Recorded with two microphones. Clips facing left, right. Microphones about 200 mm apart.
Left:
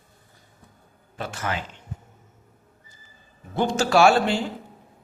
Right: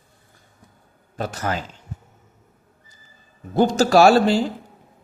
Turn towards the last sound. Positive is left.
turn(degrees=-40)  # may be behind; listen again after turning